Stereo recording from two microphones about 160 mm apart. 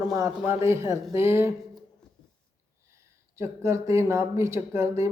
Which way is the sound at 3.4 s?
20° right (ahead or behind).